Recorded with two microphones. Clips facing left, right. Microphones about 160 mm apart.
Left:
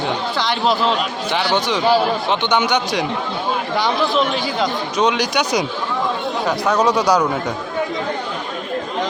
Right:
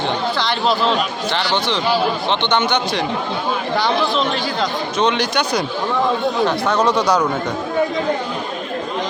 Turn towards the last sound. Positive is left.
turn(degrees=10)  # may be behind; listen again after turning